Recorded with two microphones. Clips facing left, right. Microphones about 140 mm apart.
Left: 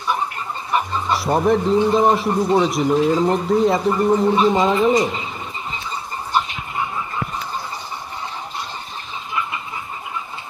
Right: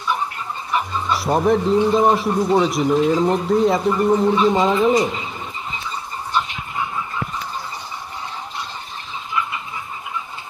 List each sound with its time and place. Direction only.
1.1 s a man's voice: centre (ahead or behind)